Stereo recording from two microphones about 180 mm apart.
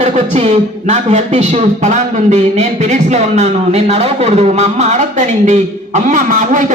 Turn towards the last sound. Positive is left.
turn(degrees=-45)  # may be behind; listen again after turning